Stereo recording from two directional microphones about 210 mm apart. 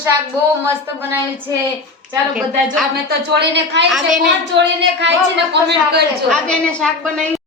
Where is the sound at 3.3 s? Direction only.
55° right (ahead or behind).